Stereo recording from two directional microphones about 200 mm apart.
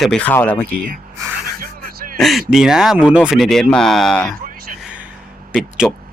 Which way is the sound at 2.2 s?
Centre (ahead or behind).